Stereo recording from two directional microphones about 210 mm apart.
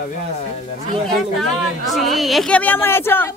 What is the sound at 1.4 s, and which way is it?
Speech, centre (ahead or behind).